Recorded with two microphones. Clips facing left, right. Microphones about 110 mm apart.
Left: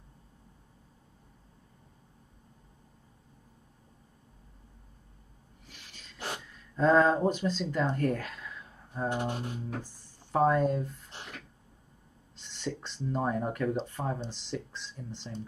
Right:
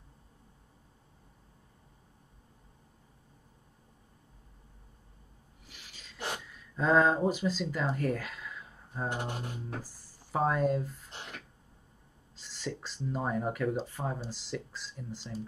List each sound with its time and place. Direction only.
5.7 s a sound: 5° right (ahead or behind)
6.8 s speech: 5° right (ahead or behind)
9.1 s music: 20° left (ahead or behind)
9.8 s speech: 5° right (ahead or behind)
12.4 s speech: 5° right (ahead or behind)